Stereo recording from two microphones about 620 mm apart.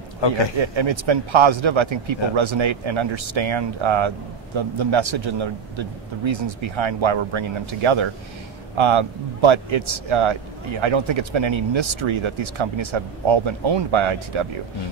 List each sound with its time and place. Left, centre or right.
0.2 s a man's voice: left
0.6 s a man's voice: right